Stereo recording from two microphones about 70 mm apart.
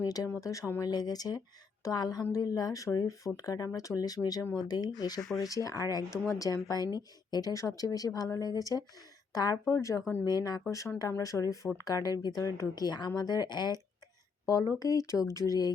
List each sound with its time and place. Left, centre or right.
0.0 s speech: left
0.9 s speech: left
5.4 s speech: left
6.9 s speech: left
7.8 s speech: left
9.6 s speech: left
10.2 s speech: left
10.7 s speech: left
11.9 s speech: left
14.4 s speech: left